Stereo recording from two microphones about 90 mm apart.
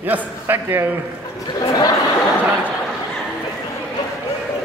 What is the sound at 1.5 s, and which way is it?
Speech, 45° left (ahead or behind).